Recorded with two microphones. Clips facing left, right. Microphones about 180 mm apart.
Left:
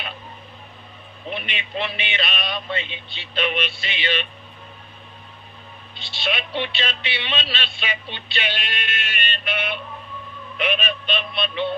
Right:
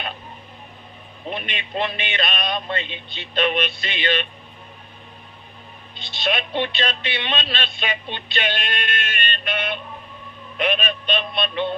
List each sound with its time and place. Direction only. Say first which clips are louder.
1.3 s speech: right 1 dB; 45° right (ahead or behind)
6.1 s speech: right 3 dB; 45° right (ahead or behind)
10.6 s speech: right 2 dB; 45° right (ahead or behind)